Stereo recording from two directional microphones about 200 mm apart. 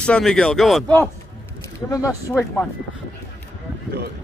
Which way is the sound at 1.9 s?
15° left (ahead or behind).